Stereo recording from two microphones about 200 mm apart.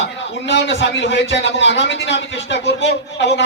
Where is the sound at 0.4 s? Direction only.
60° left (ahead or behind).